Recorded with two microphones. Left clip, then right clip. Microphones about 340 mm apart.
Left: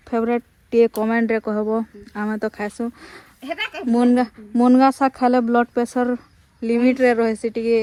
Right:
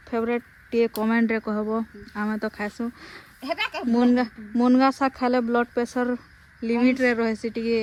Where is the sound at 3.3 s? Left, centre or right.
Right.